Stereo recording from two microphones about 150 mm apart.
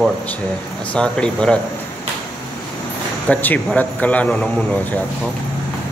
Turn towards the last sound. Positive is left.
turn(degrees=10)  # may be behind; listen again after turning